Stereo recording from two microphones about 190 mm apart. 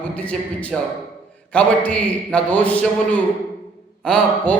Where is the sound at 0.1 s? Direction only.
5° left (ahead or behind).